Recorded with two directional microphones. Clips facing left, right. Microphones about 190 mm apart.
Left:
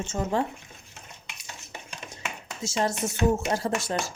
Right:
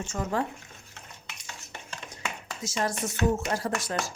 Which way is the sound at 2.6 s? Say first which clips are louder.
Left 3 dB; 25° left (ahead or behind).